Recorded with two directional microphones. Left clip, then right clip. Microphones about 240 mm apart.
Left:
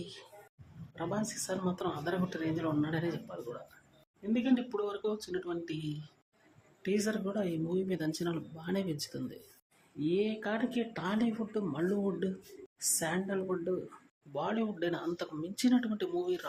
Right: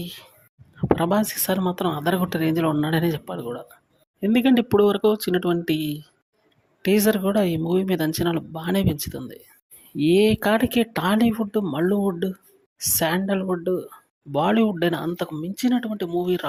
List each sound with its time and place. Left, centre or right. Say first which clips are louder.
0.9 s speech: right 14 dB; right
6.8 s speech: right 14 dB; right